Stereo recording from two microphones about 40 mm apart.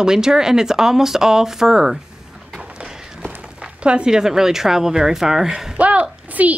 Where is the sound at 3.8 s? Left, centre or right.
Right.